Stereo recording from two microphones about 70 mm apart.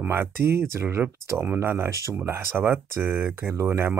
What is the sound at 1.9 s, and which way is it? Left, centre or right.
Speech, right.